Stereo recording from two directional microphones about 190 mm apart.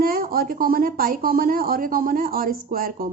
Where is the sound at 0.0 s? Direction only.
50° right (ahead or behind).